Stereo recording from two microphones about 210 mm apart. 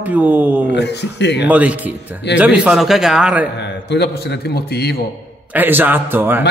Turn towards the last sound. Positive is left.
turn(degrees=-10)  # may be behind; listen again after turning